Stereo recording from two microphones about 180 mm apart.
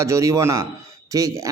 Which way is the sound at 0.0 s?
15° right (ahead or behind).